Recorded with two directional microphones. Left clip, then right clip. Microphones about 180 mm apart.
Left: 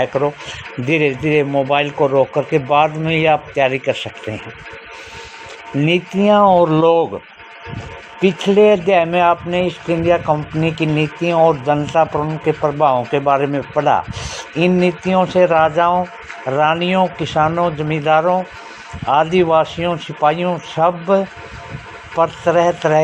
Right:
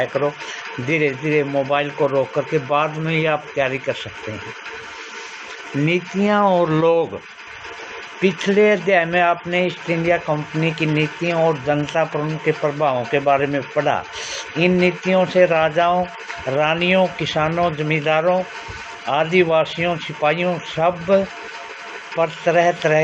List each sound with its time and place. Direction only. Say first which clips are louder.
0.0 s a man's voice: left 3 dB; 40° left (ahead or behind)
5.8 s speech: left 5 dB; 30° left (ahead or behind)
8.2 s a man's voice: left 4 dB; 30° left (ahead or behind)